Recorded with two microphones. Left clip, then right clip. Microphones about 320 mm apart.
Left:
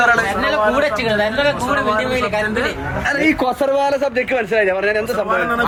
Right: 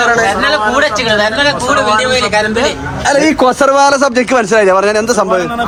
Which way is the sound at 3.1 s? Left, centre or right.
Right.